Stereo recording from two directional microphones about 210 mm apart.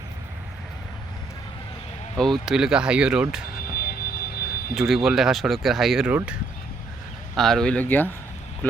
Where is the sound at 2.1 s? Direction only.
Centre (ahead or behind).